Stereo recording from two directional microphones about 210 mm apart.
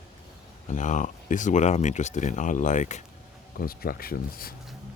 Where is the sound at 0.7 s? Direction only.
35° left (ahead or behind).